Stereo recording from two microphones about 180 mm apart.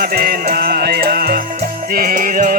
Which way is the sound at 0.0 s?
60° right (ahead or behind).